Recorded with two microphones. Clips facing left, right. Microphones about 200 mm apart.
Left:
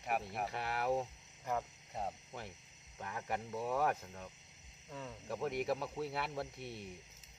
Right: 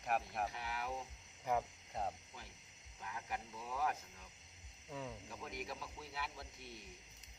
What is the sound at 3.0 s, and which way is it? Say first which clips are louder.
Speech: left 5 dB; 60° left (ahead or behind).